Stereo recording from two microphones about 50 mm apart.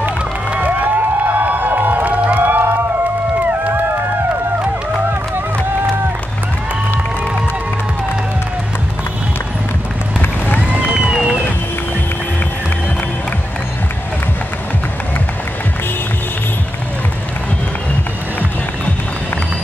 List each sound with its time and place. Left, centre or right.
0.5 s music: right
10.7 s run: centre